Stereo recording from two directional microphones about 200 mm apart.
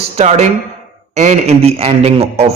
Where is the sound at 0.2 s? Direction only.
35° right (ahead or behind).